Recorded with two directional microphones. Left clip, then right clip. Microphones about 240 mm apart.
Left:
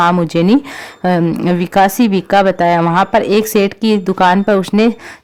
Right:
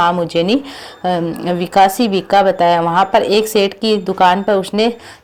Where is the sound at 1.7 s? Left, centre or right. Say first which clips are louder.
Right 1 dB; left.